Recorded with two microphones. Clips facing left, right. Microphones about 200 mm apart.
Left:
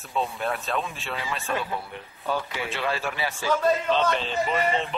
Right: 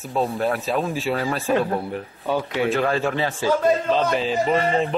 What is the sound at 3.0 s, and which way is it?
Speech, 30° right (ahead or behind).